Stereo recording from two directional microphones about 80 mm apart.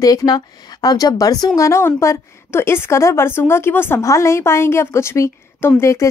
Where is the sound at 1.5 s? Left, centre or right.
Left.